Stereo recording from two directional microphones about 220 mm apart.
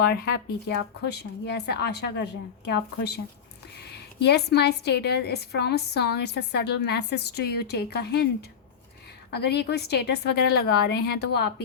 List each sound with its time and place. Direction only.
0.0 s a woman's voice: 45° left (ahead or behind)
4.2 s a woman's voice: 50° left (ahead or behind)